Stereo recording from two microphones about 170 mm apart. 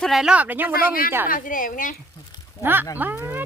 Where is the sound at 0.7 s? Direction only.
60° left (ahead or behind).